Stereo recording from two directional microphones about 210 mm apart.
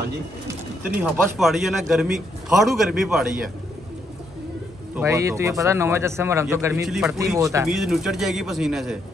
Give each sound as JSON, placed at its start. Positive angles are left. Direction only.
{"t": 1.1, "sound": "a man's voice", "side_deg": 0}
{"t": 4.9, "sound": "a man's voice", "side_deg": -15}
{"t": 6.9, "sound": "a man's voice", "side_deg": 0}
{"t": 7.2, "sound": "a man's voice", "side_deg": -15}
{"t": 7.6, "sound": "a man's voice", "side_deg": 0}